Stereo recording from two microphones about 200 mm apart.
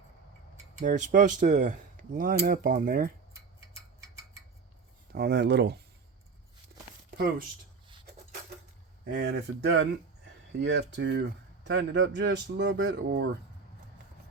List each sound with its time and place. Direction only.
0.8 s speech: 40° right (ahead or behind)
5.1 s speech: 55° right (ahead or behind)
7.2 s speech: 45° right (ahead or behind)
9.0 s speech: 60° right (ahead or behind)